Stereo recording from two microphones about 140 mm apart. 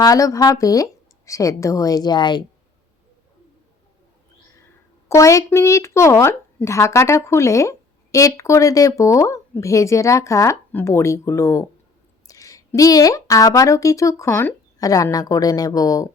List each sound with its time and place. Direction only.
0.0 s speech: 25° left (ahead or behind)
5.0 s speech: 20° left (ahead or behind)